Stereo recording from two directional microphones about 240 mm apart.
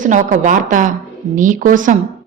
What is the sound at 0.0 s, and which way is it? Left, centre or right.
A woman's voice, right.